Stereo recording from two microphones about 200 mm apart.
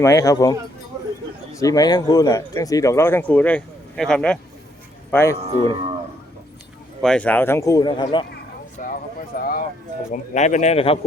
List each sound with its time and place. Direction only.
0.0 s speech: 15° left (ahead or behind)
1.5 s speech: 15° left (ahead or behind)
5.4 s speech: 30° right (ahead or behind)
7.0 s speech: 5° left (ahead or behind); by 8.3 s 25° left (ahead or behind)
8.8 s horse: 45° left (ahead or behind)
9.3 s speech: 45° left (ahead or behind)
10.1 s speech: 35° left (ahead or behind)